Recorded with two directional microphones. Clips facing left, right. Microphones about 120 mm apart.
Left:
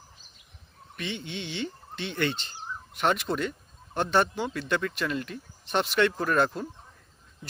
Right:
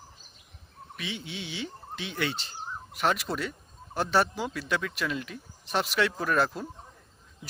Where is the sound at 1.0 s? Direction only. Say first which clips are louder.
Left 3 dB; centre (ahead or behind).